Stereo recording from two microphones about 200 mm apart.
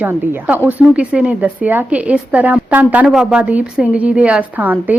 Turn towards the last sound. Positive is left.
turn(degrees=-10)  # may be behind; listen again after turning